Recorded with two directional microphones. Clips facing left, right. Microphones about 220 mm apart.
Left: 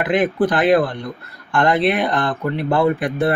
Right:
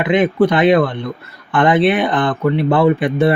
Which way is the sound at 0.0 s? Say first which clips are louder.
Right 4 dB; centre (ahead or behind).